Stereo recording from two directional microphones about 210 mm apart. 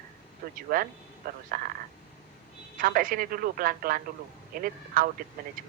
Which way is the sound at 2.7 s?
40° right (ahead or behind).